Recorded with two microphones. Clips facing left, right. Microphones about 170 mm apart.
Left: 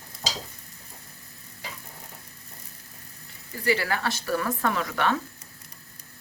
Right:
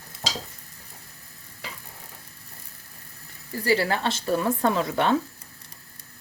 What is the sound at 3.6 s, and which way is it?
Speech, 30° right (ahead or behind).